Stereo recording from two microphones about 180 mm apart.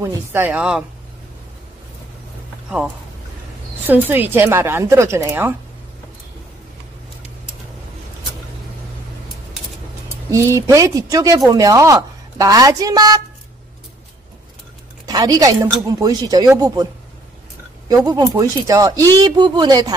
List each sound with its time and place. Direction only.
0.0 s a woman's voice: 15° right (ahead or behind)
3.8 s a woman's voice: 10° right (ahead or behind)
10.3 s speech: 15° right (ahead or behind)
15.0 s speech: 20° right (ahead or behind)
17.8 s speech: 20° right (ahead or behind)